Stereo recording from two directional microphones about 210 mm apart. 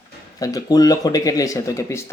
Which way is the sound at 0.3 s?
15° left (ahead or behind).